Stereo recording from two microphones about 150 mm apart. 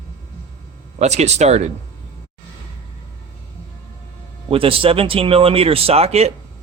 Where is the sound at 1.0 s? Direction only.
50° right (ahead or behind).